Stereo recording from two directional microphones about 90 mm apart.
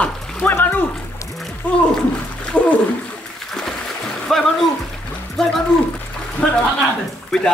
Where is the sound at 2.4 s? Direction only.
10° left (ahead or behind).